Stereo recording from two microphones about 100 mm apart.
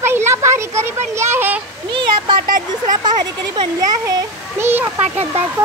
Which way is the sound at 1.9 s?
50° right (ahead or behind).